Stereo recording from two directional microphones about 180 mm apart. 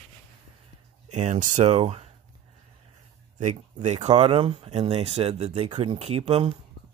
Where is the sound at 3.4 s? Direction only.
40° right (ahead or behind).